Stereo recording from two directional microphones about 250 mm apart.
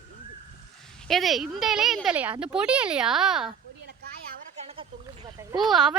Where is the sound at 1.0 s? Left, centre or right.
Centre.